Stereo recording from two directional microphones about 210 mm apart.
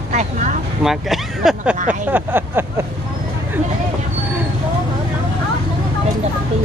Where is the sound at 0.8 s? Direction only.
Centre (ahead or behind).